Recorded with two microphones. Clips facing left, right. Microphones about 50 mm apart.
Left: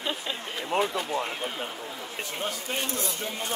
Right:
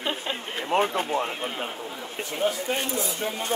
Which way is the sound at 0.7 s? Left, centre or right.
Right.